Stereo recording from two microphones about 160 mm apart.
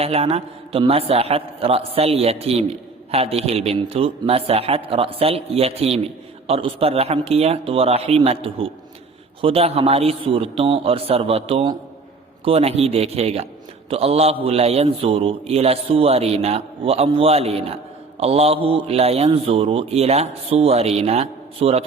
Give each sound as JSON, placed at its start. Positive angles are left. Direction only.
{"t": 0.0, "sound": "a man's voice", "side_deg": -40}